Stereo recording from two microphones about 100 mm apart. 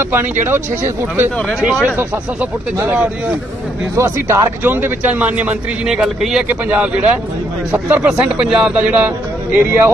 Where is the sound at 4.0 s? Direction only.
30° right (ahead or behind).